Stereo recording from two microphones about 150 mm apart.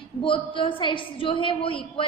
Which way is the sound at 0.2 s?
35° left (ahead or behind).